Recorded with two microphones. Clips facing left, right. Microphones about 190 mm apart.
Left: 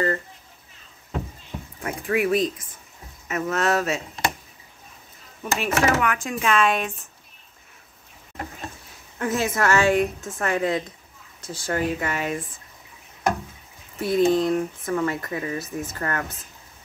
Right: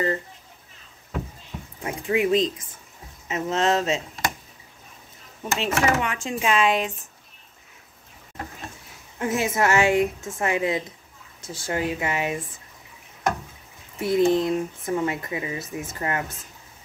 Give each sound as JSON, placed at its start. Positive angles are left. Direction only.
{"t": 1.8, "sound": "speech", "side_deg": -20}
{"t": 5.4, "sound": "speech", "side_deg": -25}
{"t": 9.2, "sound": "speech", "side_deg": -20}
{"t": 13.9, "sound": "speech", "side_deg": -20}